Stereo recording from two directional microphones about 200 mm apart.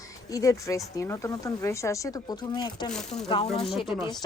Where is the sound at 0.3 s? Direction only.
15° left (ahead or behind).